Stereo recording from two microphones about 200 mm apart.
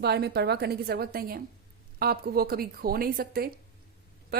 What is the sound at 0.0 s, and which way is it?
A woman's voice, 55° right (ahead or behind).